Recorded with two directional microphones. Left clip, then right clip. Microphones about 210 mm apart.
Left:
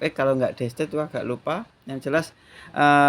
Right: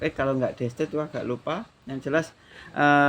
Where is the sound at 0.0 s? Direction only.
40° left (ahead or behind).